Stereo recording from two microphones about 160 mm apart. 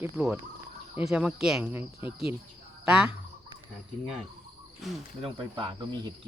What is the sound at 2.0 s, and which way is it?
Speech, 35° left (ahead or behind).